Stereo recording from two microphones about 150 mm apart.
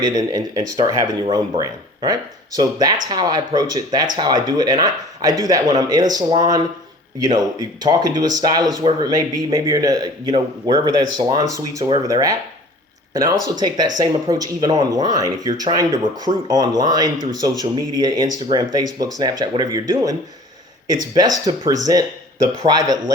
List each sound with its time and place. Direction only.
0.0 s speech: 25° right (ahead or behind)